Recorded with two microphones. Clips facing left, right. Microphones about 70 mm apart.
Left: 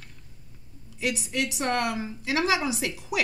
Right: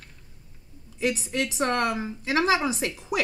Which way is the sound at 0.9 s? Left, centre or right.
Right.